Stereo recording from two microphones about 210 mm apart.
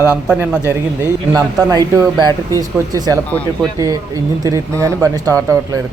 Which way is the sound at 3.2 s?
5° left (ahead or behind).